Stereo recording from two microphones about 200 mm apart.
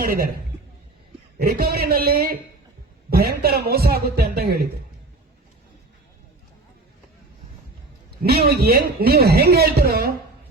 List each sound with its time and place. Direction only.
1.4 s a man's voice: 50° right (ahead or behind)
8.2 s a man's voice: 50° right (ahead or behind)